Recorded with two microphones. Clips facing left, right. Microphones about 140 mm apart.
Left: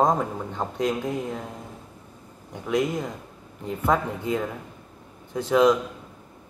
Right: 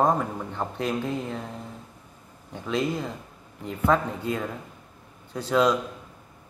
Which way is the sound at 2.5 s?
15° left (ahead or behind).